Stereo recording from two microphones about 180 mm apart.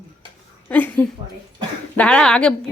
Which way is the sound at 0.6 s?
10° left (ahead or behind).